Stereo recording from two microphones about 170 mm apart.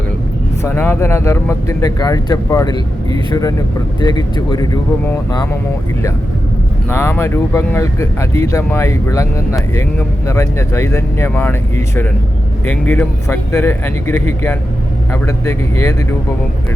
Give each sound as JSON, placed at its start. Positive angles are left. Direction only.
{"t": 0.6, "sound": "speech", "side_deg": 15}
{"t": 4.0, "sound": "speech", "side_deg": 25}
{"t": 6.9, "sound": "speech", "side_deg": 15}
{"t": 12.6, "sound": "speech", "side_deg": 10}